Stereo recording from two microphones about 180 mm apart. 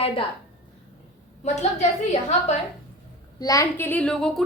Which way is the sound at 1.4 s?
40° left (ahead or behind).